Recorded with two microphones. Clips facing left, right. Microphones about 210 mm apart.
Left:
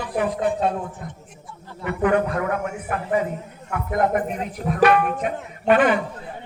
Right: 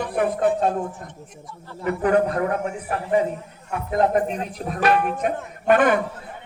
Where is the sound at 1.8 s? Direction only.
35° right (ahead or behind).